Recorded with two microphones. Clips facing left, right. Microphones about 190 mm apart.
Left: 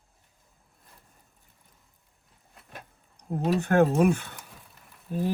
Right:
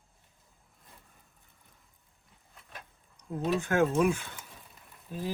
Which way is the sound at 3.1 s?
60° left (ahead or behind).